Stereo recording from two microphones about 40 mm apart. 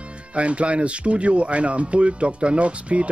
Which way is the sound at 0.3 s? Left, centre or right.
Right.